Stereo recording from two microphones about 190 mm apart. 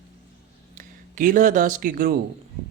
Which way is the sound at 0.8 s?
45° right (ahead or behind).